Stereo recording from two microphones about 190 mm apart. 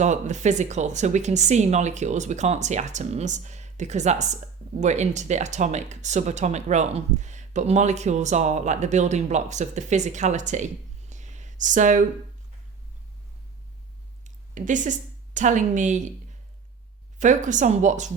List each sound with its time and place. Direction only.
0.0 s speech: 40° right (ahead or behind)
11.1 s a sound: 40° right (ahead or behind)
14.3 s a woman's voice: 40° right (ahead or behind)
17.2 s speech: 40° right (ahead or behind)